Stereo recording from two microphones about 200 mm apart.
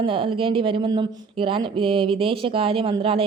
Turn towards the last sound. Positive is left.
turn(degrees=-25)  # may be behind; listen again after turning